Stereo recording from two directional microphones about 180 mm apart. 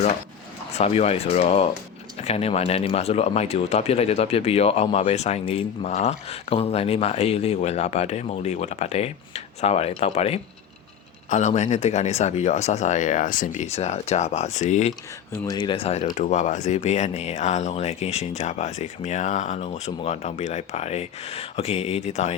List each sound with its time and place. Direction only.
0.7 s speech: 35° left (ahead or behind)
15.3 s speech: 20° left (ahead or behind); by 22.4 s 40° left (ahead or behind)